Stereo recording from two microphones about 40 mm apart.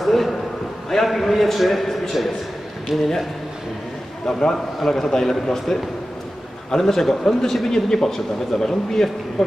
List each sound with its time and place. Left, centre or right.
0.0 s a sound: centre
1.0 s a man's voice: centre
4.3 s speech: centre